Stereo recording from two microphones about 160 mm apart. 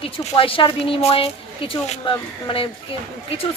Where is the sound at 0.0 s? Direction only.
35° left (ahead or behind).